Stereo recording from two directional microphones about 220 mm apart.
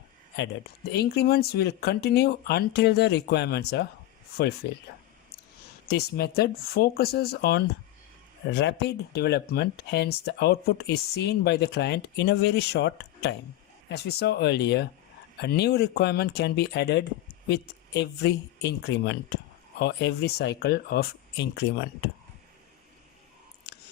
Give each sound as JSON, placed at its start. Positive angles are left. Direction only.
{"t": 0.3, "sound": "speech", "side_deg": 50}
{"t": 5.9, "sound": "speech", "side_deg": 45}